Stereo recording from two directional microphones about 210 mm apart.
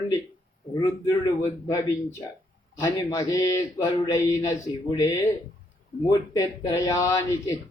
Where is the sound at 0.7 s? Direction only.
20° left (ahead or behind).